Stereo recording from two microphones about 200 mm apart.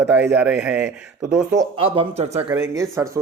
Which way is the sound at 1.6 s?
25° right (ahead or behind).